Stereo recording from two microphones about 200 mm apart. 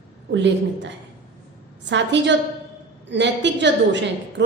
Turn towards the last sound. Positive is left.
turn(degrees=-60)  # may be behind; listen again after turning